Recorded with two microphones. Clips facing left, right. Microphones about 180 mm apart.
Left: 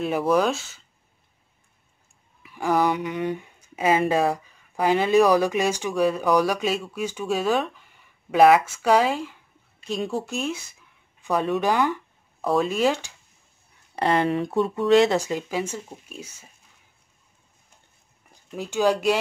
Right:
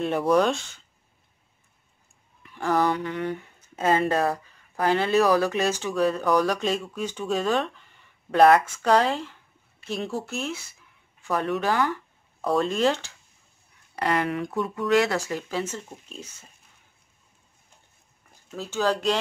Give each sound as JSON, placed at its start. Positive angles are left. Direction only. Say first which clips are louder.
{"t": 0.0, "sound": "speech", "louder": "even", "side_deg": 5}
{"t": 2.4, "sound": "speech", "louder": "left 1 dB", "side_deg": 10}
{"t": 12.4, "sound": "speech", "louder": "left 1 dB", "side_deg": 5}
{"t": 13.9, "sound": "speech", "louder": "left 4 dB", "side_deg": 25}
{"t": 18.5, "sound": "speech", "louder": "left 3 dB", "side_deg": 15}